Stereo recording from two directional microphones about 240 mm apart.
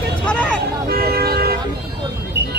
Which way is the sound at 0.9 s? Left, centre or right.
Right.